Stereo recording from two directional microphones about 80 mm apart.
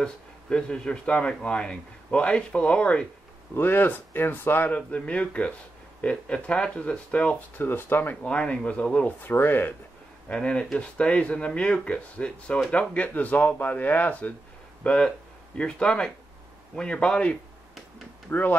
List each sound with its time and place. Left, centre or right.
0.0 s speech: centre
3.5 s speech: left
9.2 s speech: left
10.2 s speech: centre